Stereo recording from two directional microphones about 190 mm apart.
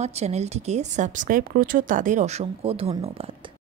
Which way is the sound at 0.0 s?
35° right (ahead or behind).